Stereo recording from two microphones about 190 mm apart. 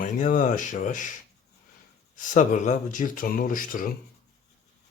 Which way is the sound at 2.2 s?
40° left (ahead or behind).